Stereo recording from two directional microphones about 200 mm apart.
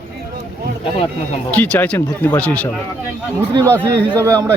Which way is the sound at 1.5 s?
10° left (ahead or behind).